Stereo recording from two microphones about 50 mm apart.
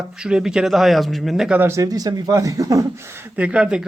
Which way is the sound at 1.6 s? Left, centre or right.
Right.